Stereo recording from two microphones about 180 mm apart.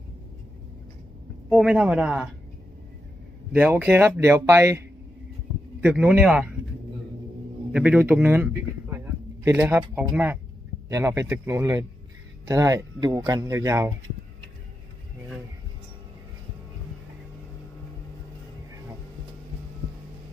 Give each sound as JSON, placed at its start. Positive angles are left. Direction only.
{"t": 1.5, "sound": "speech", "side_deg": -5}
{"t": 3.5, "sound": "speech", "side_deg": -10}
{"t": 5.9, "sound": "speech", "side_deg": -5}
{"t": 7.7, "sound": "speech", "side_deg": -5}